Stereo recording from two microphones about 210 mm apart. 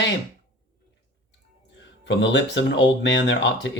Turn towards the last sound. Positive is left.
turn(degrees=60)  # may be behind; listen again after turning